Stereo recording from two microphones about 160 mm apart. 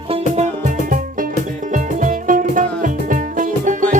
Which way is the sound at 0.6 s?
55° right (ahead or behind).